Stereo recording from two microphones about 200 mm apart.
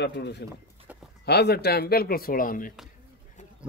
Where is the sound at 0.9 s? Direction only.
5° right (ahead or behind).